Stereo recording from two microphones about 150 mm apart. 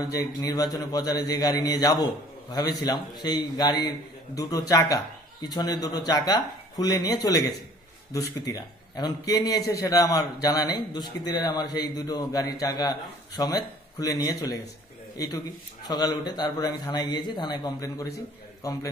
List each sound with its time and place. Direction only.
0.0 s a man's voice: 25° left (ahead or behind)